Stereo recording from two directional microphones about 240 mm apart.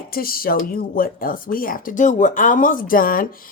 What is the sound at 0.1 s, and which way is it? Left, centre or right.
A woman's voice, left.